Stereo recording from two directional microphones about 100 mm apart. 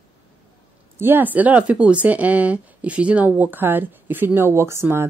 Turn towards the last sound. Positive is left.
turn(degrees=-25)  # may be behind; listen again after turning